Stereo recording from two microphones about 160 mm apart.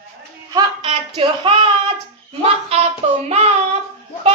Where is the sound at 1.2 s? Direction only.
35° right (ahead or behind).